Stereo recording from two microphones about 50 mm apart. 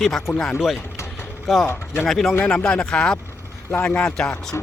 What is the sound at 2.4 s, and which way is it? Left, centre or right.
Speech, left.